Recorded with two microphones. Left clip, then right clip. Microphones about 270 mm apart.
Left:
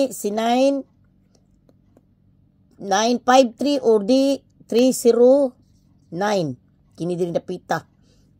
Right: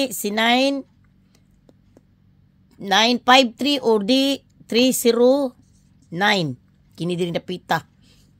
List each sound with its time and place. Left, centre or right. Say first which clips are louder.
0.0 s a woman's voice: right 1 dB; right
2.7 s a woman's voice: right 2 dB; right
5.3 s a woman's voice: left 3 dB; right
6.0 s speech: right 2 dB; right